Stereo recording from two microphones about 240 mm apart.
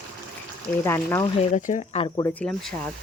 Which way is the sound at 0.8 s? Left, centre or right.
Centre.